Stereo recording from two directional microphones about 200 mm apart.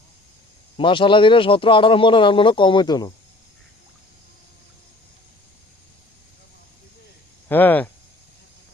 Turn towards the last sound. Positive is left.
turn(degrees=10)  # may be behind; listen again after turning